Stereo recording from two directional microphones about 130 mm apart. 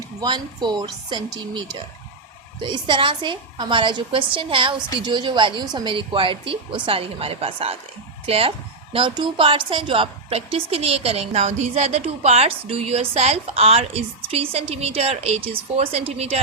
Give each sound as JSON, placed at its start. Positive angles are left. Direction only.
{"t": 0.2, "sound": "a woman's voice", "side_deg": -35}